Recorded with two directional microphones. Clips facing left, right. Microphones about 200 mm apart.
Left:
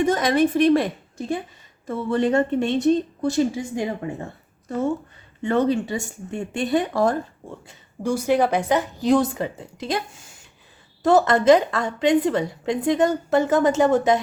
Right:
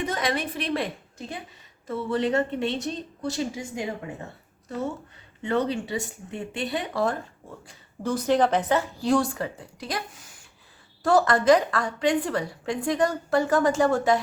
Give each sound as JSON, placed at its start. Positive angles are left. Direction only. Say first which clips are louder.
{"t": 0.0, "sound": "a woman's voice", "louder": "left 9 dB", "side_deg": 45}
{"t": 1.9, "sound": "a woman's voice", "louder": "left 4 dB", "side_deg": 50}
{"t": 5.4, "sound": "a woman's voice", "louder": "left 5 dB", "side_deg": 50}
{"t": 7.7, "sound": "a woman's voice", "louder": "left 4 dB", "side_deg": 10}